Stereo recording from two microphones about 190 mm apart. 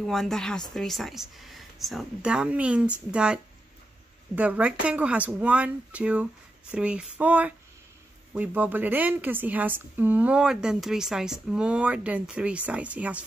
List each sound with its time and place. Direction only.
0.0 s speech: centre (ahead or behind)
4.4 s a woman's voice: 5° right (ahead or behind)